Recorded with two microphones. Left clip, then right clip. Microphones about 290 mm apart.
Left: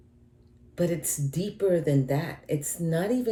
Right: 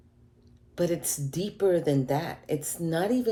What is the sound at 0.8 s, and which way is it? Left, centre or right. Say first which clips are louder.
Speech: even; centre.